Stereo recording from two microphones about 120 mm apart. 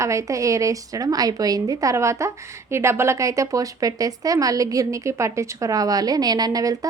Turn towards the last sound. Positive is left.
turn(degrees=-30)  # may be behind; listen again after turning